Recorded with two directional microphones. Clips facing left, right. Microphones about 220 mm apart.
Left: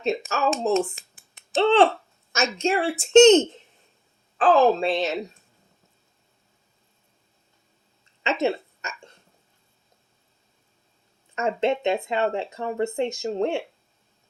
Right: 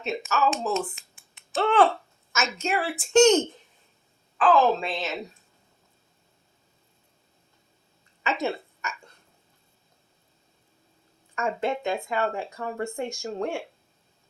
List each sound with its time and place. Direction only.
0.0 s a woman's voice: 35° left (ahead or behind)
8.2 s a sound: 25° left (ahead or behind)
11.3 s speech: 25° left (ahead or behind)